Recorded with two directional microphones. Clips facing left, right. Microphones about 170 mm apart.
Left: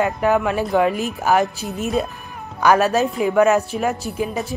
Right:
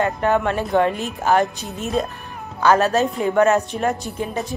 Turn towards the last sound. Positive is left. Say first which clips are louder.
# left 2 dB
turn(degrees=5)  # may be behind; listen again after turning